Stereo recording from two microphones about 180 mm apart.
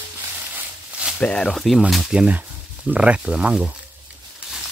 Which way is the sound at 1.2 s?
5° left (ahead or behind).